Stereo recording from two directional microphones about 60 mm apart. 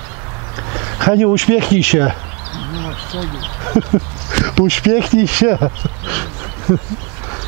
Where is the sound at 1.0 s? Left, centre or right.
Centre.